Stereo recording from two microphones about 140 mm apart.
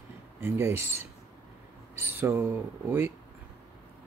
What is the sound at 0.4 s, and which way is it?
Speech, 15° right (ahead or behind).